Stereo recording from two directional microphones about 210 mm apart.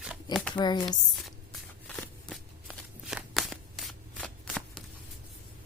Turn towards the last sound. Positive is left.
turn(degrees=5)  # may be behind; listen again after turning